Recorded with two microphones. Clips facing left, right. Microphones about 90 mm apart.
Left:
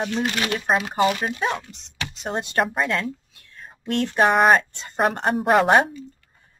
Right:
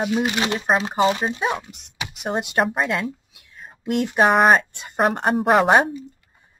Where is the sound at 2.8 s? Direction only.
15° right (ahead or behind).